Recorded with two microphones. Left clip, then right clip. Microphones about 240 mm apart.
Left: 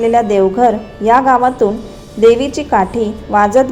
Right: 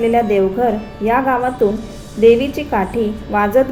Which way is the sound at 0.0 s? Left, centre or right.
Centre.